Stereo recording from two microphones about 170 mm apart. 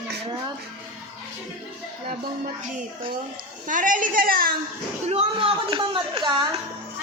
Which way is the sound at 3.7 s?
50° right (ahead or behind).